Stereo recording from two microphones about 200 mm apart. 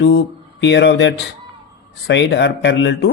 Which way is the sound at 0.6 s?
60° left (ahead or behind).